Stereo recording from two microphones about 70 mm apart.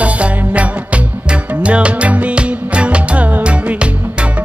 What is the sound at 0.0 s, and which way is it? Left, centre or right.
Music, right.